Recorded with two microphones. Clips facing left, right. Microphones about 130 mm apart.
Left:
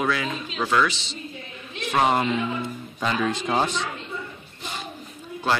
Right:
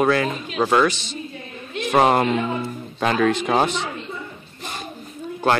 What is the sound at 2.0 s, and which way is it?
A man's voice, 55° right (ahead or behind).